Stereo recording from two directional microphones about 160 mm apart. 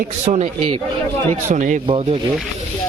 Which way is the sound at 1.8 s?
35° right (ahead or behind).